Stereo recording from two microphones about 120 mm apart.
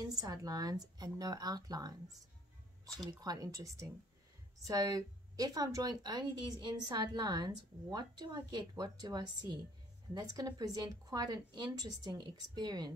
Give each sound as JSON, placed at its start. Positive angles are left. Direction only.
{"t": 0.0, "sound": "speech", "side_deg": -30}
{"t": 3.2, "sound": "speech", "side_deg": -30}
{"t": 4.6, "sound": "speech", "side_deg": -30}